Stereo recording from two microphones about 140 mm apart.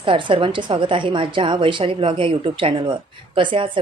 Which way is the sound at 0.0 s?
35° right (ahead or behind).